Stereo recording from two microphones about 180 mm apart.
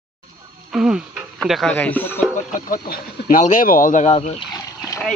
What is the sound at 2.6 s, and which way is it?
Speech, 50° left (ahead or behind).